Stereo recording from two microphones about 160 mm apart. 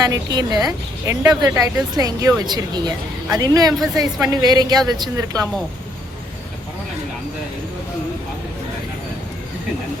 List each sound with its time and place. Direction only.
0.1 s a woman's voice: 25° right (ahead or behind)